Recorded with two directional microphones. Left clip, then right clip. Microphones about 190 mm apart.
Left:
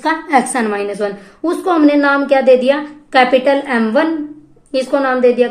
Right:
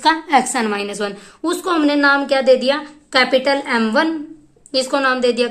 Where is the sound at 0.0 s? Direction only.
20° right (ahead or behind).